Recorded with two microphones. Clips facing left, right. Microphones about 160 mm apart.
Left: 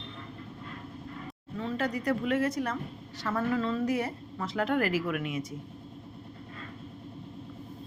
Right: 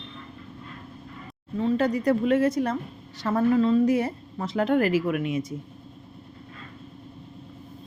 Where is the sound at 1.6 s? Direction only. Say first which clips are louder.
Right 8 dB; 20° right (ahead or behind).